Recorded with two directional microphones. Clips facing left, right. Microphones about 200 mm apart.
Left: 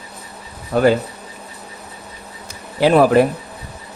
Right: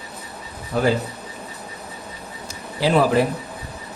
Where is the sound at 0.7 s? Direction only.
60° left (ahead or behind).